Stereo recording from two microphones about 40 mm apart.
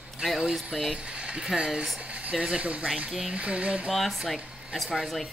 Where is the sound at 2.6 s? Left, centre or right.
Right.